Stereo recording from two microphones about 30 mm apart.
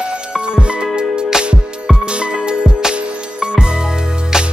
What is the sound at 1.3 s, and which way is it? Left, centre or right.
Music, centre.